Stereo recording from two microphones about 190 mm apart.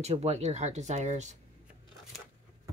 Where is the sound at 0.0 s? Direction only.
35° right (ahead or behind).